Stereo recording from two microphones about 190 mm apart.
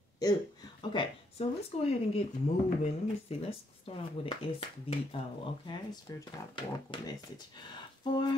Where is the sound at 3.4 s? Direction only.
30° left (ahead or behind).